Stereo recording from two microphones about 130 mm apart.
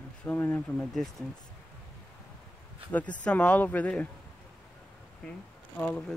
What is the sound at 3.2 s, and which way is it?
Speech, 10° left (ahead or behind).